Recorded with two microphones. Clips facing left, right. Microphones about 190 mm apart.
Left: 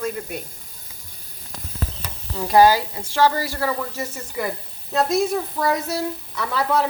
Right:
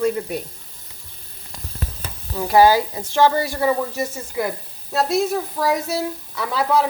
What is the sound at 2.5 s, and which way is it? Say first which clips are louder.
A woman's voice: right 1 dB; 10° right (ahead or behind).